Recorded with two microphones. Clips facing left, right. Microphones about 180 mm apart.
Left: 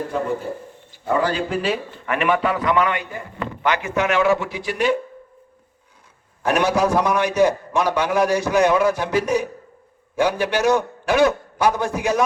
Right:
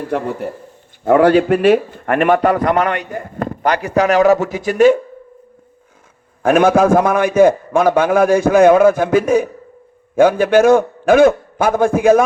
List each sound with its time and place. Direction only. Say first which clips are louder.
1.0 s a man's voice: right 10 dB; 60° right (ahead or behind); by 4.9 s 45° right (ahead or behind)
6.4 s a man's voice: right 7 dB; 50° right (ahead or behind)